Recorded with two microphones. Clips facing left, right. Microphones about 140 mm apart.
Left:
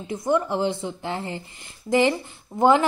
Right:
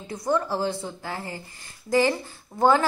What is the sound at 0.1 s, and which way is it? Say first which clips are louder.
A woman's voice: left 2 dB; 20° left (ahead or behind).